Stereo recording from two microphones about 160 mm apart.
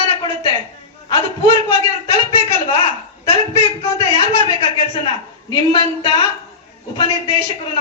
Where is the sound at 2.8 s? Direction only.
35° left (ahead or behind).